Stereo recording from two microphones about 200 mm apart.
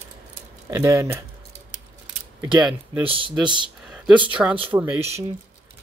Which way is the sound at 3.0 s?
25° right (ahead or behind).